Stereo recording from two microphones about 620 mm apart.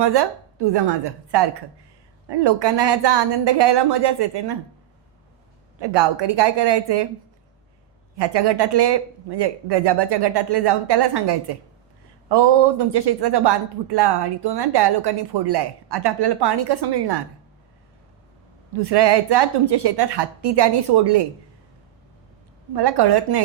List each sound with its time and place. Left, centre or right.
0.0 s speech: right
5.8 s speech: right
8.1 s speech: right
18.7 s speech: right
22.7 s speech: right